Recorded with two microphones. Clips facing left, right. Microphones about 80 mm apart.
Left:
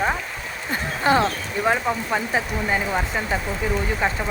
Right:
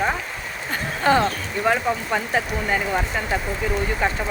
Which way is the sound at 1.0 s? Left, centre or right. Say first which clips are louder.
Right 1 dB; centre.